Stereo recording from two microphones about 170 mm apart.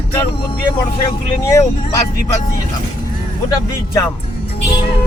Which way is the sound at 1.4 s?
20° left (ahead or behind).